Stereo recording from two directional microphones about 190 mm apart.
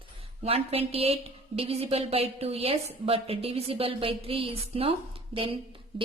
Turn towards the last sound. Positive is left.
turn(degrees=-30)  # may be behind; listen again after turning